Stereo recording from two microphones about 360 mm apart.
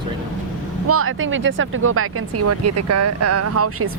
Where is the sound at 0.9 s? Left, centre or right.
Right.